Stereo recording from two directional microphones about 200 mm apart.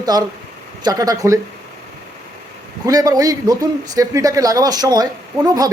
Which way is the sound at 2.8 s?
20° right (ahead or behind).